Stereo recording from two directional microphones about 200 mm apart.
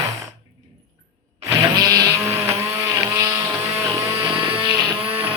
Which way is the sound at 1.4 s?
15° right (ahead or behind).